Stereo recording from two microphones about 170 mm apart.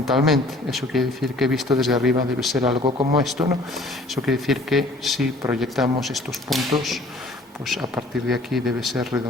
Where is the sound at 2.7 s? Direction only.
30° right (ahead or behind).